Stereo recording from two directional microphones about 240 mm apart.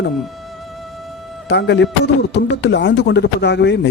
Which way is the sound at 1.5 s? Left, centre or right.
Left.